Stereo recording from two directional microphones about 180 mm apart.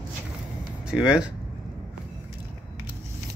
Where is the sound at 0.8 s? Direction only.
5° right (ahead or behind).